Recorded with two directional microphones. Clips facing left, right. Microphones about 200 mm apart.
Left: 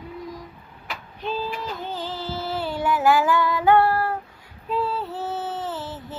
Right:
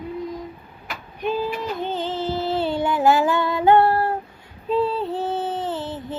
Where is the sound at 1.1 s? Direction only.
15° right (ahead or behind).